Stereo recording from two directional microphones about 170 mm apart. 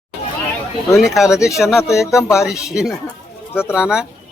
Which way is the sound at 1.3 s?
20° left (ahead or behind).